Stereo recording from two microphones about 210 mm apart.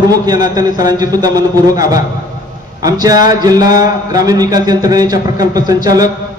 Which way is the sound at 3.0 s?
20° right (ahead or behind).